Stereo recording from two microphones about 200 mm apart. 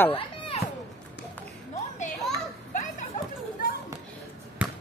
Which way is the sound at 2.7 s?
35° left (ahead or behind).